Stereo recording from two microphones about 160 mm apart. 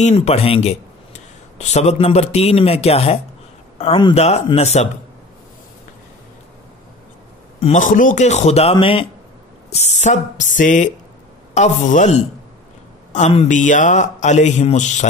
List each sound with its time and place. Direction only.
0.0 s a man's voice: 40° left (ahead or behind)
7.6 s speech: 50° left (ahead or behind)